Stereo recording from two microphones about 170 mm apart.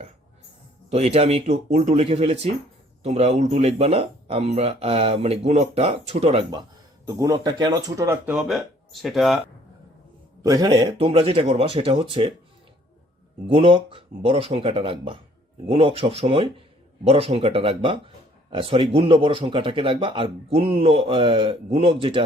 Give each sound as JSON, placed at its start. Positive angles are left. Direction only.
{"t": 0.9, "sound": "speech", "side_deg": -40}
{"t": 7.1, "sound": "speech", "side_deg": -20}
{"t": 8.3, "sound": "speech", "side_deg": -5}
{"t": 10.4, "sound": "speech", "side_deg": -20}
{"t": 13.5, "sound": "speech", "side_deg": -30}